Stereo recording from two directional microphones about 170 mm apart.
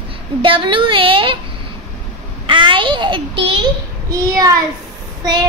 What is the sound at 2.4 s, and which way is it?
A child's voice, 30° right (ahead or behind).